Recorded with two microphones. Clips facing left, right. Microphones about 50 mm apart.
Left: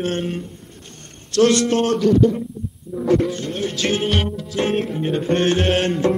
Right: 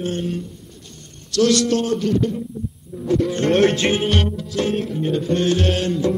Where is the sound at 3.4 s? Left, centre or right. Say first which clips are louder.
Right 10 dB; right.